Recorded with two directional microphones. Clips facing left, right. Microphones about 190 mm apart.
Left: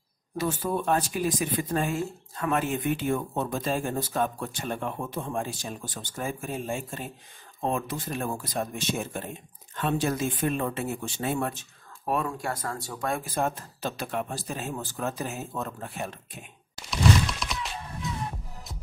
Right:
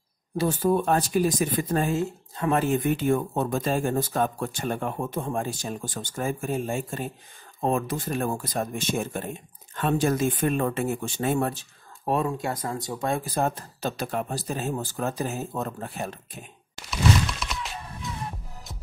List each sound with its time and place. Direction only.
0.4 s speech: 40° right (ahead or behind)
1.9 s speech: 25° right (ahead or behind)
12.1 s speech: 25° right (ahead or behind)
16.9 s a sound: centre (ahead or behind)